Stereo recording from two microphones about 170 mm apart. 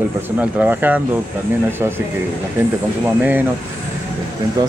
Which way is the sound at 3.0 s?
10° right (ahead or behind).